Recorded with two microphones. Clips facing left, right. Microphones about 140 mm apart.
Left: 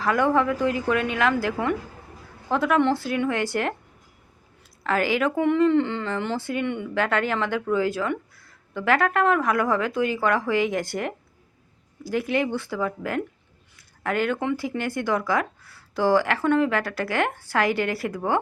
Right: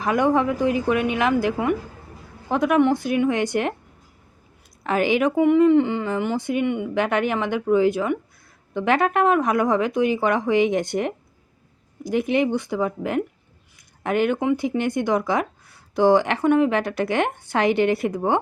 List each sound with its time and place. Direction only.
0.0 s a woman's voice: 20° right (ahead or behind)
4.8 s a woman's voice: 20° right (ahead or behind)